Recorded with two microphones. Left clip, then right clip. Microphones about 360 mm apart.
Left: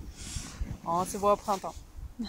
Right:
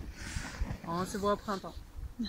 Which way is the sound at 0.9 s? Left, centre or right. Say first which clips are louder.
Left 6 dB; centre.